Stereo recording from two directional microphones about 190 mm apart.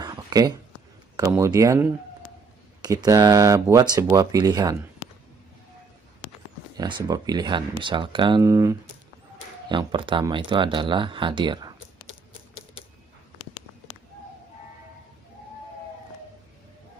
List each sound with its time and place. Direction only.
0.0 s a sound: 20° right (ahead or behind)
1.1 s speech: 15° right (ahead or behind)
6.8 s speech: 20° right (ahead or behind)